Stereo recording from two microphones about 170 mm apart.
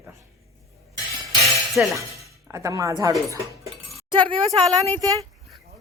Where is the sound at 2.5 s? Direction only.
20° right (ahead or behind).